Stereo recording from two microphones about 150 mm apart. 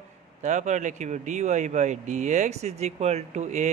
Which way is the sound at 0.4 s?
50° right (ahead or behind).